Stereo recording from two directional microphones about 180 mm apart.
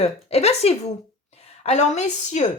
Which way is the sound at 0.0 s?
35° left (ahead or behind).